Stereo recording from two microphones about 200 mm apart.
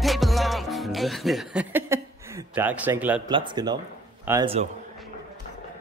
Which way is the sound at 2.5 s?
10° right (ahead or behind).